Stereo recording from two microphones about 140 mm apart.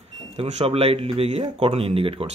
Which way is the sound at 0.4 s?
45° right (ahead or behind).